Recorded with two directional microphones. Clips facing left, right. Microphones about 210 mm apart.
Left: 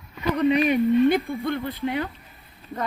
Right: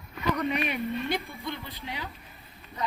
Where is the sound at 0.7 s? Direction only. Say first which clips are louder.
Left 12 dB; 55° left (ahead or behind).